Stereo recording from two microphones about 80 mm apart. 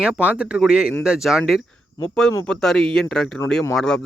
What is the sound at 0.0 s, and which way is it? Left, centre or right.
Speech, centre.